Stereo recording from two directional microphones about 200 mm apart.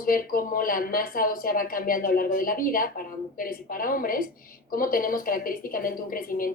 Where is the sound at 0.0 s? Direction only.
45° left (ahead or behind).